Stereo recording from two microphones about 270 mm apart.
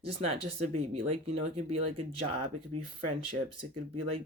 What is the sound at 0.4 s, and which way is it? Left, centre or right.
Speech, right.